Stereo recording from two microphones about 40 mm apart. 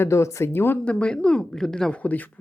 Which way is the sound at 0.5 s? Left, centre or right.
Left.